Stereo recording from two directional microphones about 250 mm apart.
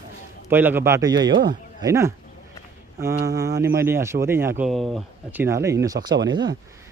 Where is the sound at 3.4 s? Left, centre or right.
Centre.